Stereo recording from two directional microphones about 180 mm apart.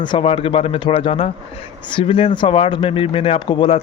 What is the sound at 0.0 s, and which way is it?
Speech, 30° left (ahead or behind).